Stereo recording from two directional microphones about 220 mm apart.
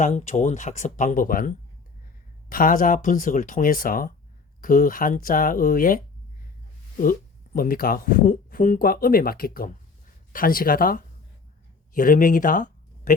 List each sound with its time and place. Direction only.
0.0 s speech: 35° left (ahead or behind)
7.0 s speech: 40° left (ahead or behind)